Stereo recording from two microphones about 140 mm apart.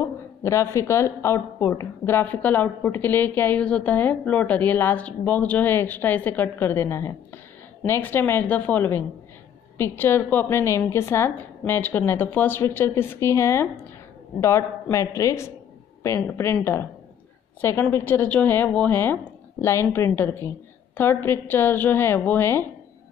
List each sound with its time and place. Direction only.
0.0 s a woman's voice: 20° left (ahead or behind)
17.6 s a woman's voice: 20° left (ahead or behind)